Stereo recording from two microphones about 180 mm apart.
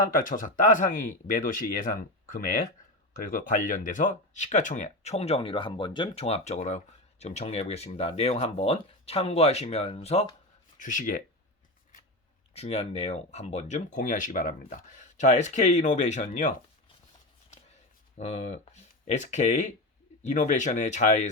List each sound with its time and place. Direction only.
0.0 s speech: 50° left (ahead or behind)
12.5 s speech: 35° left (ahead or behind)
18.2 s speech: 40° left (ahead or behind)